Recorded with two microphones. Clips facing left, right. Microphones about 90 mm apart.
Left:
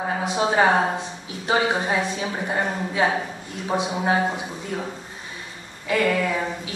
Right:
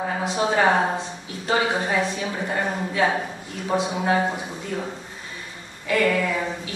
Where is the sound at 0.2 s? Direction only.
15° left (ahead or behind).